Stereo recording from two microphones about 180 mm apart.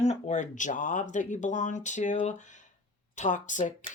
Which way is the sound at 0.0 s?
40° left (ahead or behind).